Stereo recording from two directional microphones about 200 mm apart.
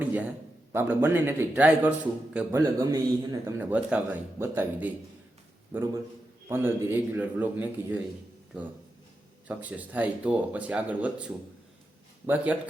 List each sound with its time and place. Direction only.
0.0 s a sound: 10° right (ahead or behind)
0.7 s speech: 10° right (ahead or behind)
9.5 s speech: 5° right (ahead or behind)